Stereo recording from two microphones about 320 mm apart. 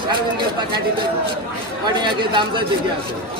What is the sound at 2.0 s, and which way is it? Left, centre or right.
Speech, centre.